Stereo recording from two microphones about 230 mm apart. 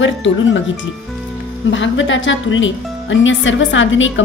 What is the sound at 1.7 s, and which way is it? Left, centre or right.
A woman's voice, left.